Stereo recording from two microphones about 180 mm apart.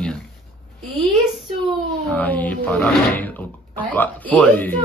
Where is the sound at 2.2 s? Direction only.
10° left (ahead or behind).